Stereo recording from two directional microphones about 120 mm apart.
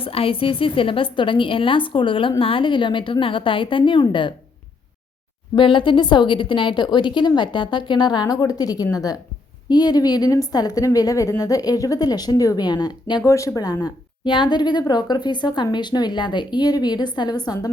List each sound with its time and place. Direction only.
0.0 s a woman's voice: 50° left (ahead or behind)
5.5 s a woman's voice: 45° left (ahead or behind)